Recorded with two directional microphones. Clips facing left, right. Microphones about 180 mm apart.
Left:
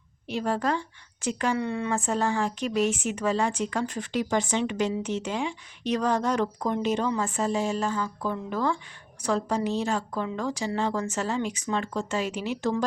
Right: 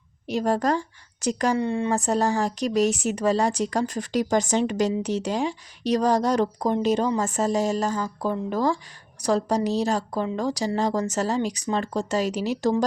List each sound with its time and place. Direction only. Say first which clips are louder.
0.3 s speech: right 4 dB; 40° right (ahead or behind)
1.5 s speech: right 4 dB; 30° right (ahead or behind)